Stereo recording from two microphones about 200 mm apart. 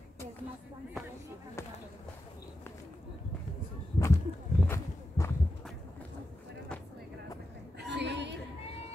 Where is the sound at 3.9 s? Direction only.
15° left (ahead or behind).